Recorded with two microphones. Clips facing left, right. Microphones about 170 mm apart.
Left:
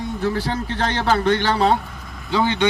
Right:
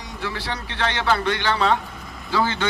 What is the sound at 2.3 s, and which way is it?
Speech, 20° left (ahead or behind).